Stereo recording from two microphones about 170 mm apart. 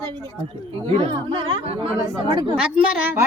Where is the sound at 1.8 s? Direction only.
25° right (ahead or behind).